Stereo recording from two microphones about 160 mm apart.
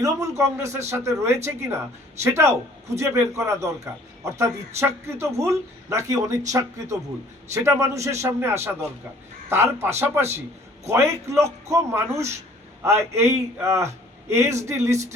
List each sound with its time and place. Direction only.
0.0 s a man's voice: 20° right (ahead or behind)
9.8 s a man's voice: 15° right (ahead or behind)